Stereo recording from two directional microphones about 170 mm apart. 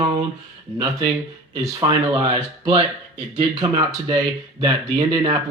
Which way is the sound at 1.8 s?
30° right (ahead or behind).